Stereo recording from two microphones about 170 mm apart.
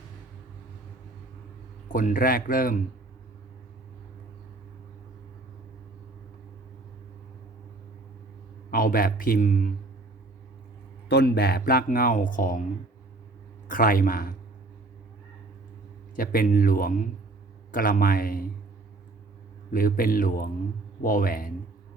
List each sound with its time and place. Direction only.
1.9 s speech: 50° left (ahead or behind)
8.7 s speech: 55° left (ahead or behind)
11.1 s speech: 65° left (ahead or behind); by 12.6 s 50° left (ahead or behind)
13.7 s speech: 55° left (ahead or behind)
16.1 s speech: 55° left (ahead or behind)
19.7 s speech: 55° left (ahead or behind)